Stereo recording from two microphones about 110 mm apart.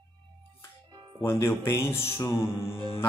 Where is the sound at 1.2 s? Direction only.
25° left (ahead or behind).